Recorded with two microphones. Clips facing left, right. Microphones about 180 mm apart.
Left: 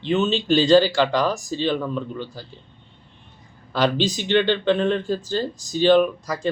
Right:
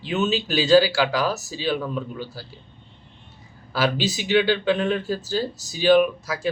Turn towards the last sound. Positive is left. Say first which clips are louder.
# left 1 dB
turn(degrees=-5)  # may be behind; listen again after turning